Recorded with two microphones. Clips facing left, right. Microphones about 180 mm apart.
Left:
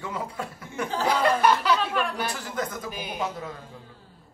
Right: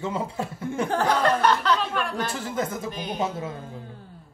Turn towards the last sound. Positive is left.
turn(degrees=-25)  # may be behind; listen again after turning